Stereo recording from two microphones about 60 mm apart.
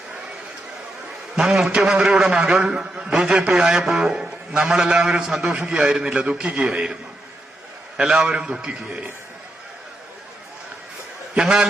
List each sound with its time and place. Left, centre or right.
1.4 s a man's voice: centre
7.9 s a man's voice: centre
11.3 s a man's voice: centre